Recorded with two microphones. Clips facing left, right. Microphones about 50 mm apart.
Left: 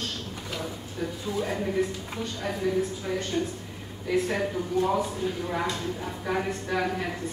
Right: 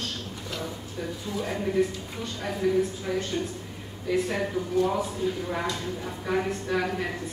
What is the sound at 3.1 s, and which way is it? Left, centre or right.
Speech, centre.